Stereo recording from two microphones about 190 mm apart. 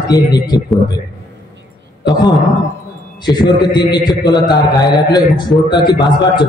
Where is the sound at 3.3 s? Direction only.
20° left (ahead or behind).